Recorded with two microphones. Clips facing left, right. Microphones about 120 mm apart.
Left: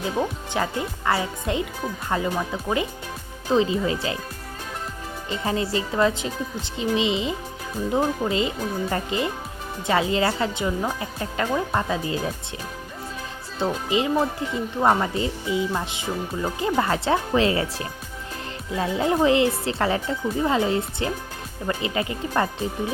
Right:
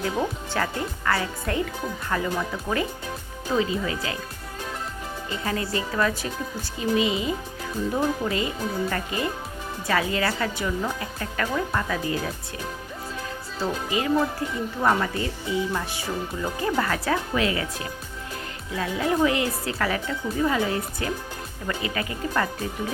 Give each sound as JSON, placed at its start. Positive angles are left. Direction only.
{"t": 0.5, "sound": "speech", "side_deg": 20}
{"t": 5.5, "sound": "speech", "side_deg": 25}
{"t": 13.6, "sound": "speech", "side_deg": 25}